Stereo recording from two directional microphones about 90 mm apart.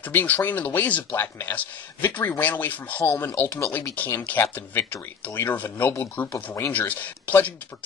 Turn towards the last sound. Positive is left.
turn(degrees=20)  # may be behind; listen again after turning